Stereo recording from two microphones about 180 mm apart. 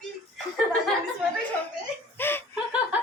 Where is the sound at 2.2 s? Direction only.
10° left (ahead or behind).